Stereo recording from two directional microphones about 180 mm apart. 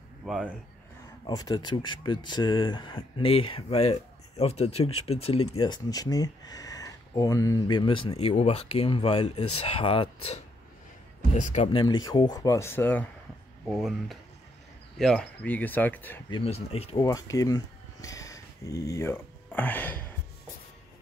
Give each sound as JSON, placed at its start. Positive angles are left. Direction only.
{"t": 0.2, "sound": "speech", "side_deg": -5}
{"t": 1.2, "sound": "speech", "side_deg": 20}
{"t": 11.6, "sound": "speech", "side_deg": 25}
{"t": 13.7, "sound": "speech", "side_deg": 0}
{"t": 16.3, "sound": "speech", "side_deg": 30}
{"t": 17.0, "sound": "speech", "side_deg": 20}